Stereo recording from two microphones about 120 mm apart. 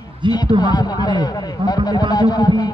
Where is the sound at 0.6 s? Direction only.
35° left (ahead or behind).